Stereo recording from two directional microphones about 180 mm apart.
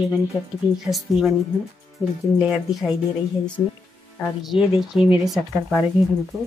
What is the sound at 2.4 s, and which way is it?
Speech, centre (ahead or behind).